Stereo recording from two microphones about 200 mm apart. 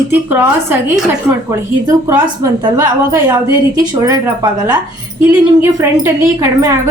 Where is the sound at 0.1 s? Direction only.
10° right (ahead or behind).